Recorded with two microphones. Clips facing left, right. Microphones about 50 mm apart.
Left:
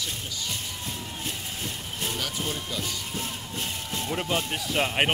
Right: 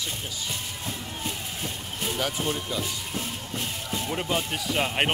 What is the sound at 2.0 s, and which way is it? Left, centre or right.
Speech, centre.